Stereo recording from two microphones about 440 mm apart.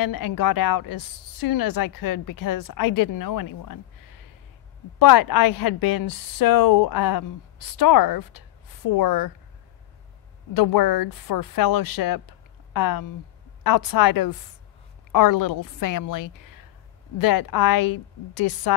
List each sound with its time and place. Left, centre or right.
0.0 s a woman's voice: left
10.5 s a woman's voice: left